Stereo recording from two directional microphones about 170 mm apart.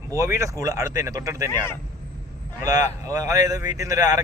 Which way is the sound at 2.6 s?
20° right (ahead or behind).